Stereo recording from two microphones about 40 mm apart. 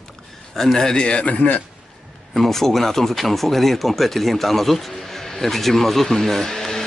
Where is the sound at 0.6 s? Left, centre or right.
Centre.